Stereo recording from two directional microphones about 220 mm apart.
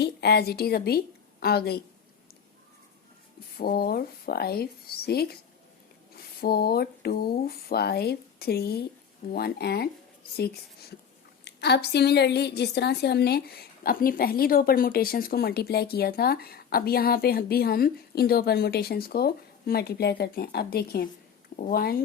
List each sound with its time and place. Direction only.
0.0 s a woman's voice: 50° left (ahead or behind)
3.6 s a woman's voice: 45° left (ahead or behind)